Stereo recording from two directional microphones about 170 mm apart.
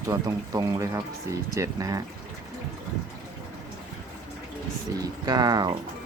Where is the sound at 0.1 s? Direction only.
20° right (ahead or behind).